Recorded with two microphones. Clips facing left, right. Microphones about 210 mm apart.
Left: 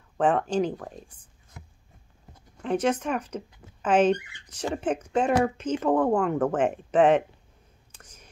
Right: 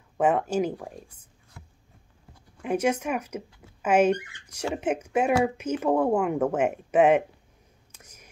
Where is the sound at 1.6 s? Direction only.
20° left (ahead or behind).